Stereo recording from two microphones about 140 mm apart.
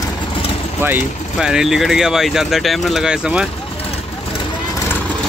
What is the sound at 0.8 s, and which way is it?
Speech, 15° right (ahead or behind).